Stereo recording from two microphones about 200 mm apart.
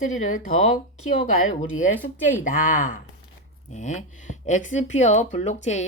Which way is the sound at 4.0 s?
40° left (ahead or behind).